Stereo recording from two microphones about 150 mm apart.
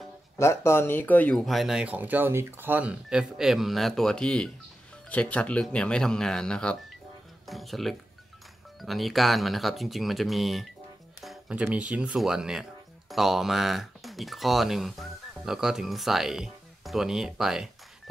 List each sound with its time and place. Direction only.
0.4 s speech: 15° left (ahead or behind); by 17.6 s 5° right (ahead or behind)